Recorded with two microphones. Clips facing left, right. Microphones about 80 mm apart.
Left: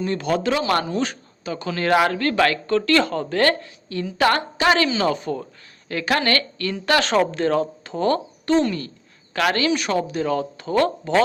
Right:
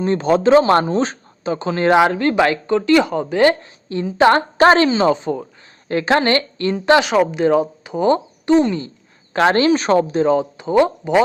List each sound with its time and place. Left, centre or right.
0.0 s speech: right
4.5 s speech: right
7.0 s speech: centre